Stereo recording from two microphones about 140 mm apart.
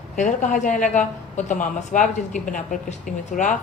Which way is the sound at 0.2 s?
65° left (ahead or behind).